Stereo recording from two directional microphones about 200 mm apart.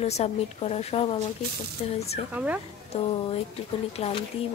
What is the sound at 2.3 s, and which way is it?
Speech, 5° right (ahead or behind).